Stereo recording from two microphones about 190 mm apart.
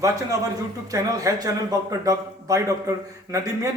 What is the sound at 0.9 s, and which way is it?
A man's voice, 20° right (ahead or behind).